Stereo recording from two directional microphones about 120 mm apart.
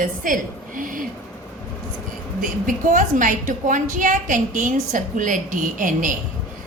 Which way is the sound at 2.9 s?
90° right.